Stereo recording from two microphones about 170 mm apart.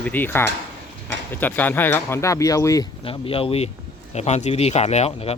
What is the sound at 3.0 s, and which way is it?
Speech, 30° left (ahead or behind).